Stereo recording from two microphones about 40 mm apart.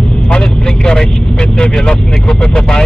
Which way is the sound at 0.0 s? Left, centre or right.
Left.